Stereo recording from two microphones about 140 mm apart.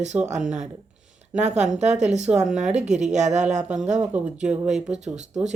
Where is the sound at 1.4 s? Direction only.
55° right (ahead or behind).